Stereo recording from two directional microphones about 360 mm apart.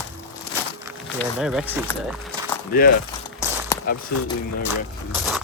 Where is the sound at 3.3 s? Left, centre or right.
Centre.